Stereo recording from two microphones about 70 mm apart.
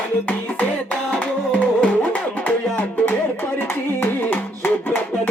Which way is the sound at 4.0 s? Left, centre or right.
Left.